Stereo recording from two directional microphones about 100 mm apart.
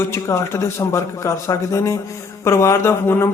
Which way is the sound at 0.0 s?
25° left (ahead or behind).